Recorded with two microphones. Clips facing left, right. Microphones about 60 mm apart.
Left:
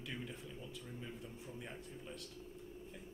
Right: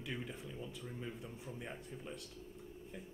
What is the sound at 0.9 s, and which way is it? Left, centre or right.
Speech, centre.